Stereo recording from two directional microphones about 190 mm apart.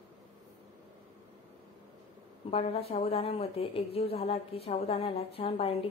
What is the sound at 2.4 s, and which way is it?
A woman's voice, 35° left (ahead or behind).